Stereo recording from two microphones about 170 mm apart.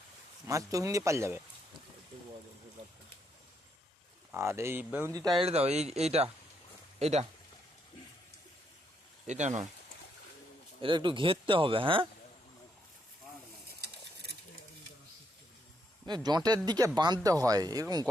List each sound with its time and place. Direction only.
0.4 s speech: 20° right (ahead or behind)
4.3 s speech: 15° right (ahead or behind)
5.4 s speech: 40° right (ahead or behind)
9.2 s speech: 45° right (ahead or behind)
10.8 s speech: 30° right (ahead or behind)
16.0 s speech: 25° right (ahead or behind)